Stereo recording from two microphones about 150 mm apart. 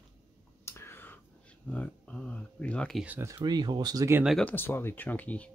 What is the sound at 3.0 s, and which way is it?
Speech, 10° right (ahead or behind).